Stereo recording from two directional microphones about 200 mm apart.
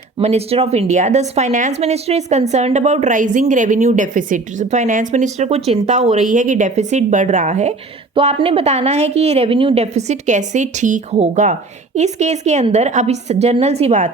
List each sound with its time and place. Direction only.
0.2 s a woman's voice: 30° right (ahead or behind)